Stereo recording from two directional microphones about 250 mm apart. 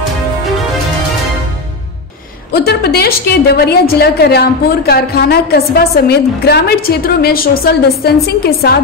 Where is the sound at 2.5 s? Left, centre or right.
Left.